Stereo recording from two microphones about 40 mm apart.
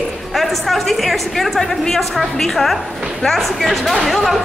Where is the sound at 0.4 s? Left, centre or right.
Centre.